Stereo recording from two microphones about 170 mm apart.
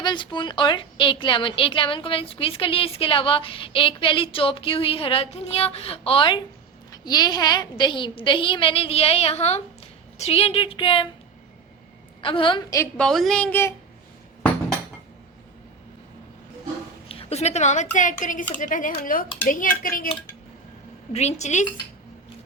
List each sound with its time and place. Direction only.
0.0 s a woman's voice: 25° left (ahead or behind)
12.2 s a woman's voice: 30° left (ahead or behind)
13.0 s a woman's voice: centre (ahead or behind)
17.1 s a woman's voice: 35° left (ahead or behind); by 20.1 s 55° left (ahead or behind)
21.1 s a woman's voice: 40° left (ahead or behind)